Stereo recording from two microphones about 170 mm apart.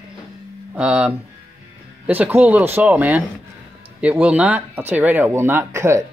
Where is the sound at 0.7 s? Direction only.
5° right (ahead or behind).